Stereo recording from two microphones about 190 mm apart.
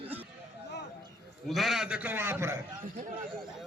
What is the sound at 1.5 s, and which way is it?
A man's voice, centre (ahead or behind).